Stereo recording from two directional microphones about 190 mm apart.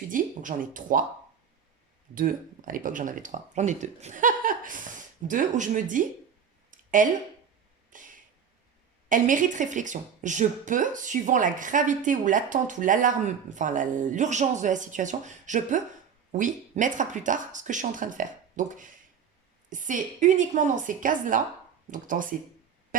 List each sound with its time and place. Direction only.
0.1 s speech: 45° right (ahead or behind)
2.1 s speech: 45° right (ahead or behind)
6.7 s a sound: 45° right (ahead or behind)
9.0 s speech: 45° right (ahead or behind)